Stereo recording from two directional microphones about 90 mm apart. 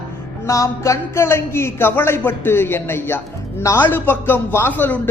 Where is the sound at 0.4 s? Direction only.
35° left (ahead or behind).